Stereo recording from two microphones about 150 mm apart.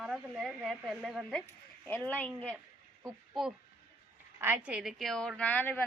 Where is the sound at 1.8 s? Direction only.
10° left (ahead or behind).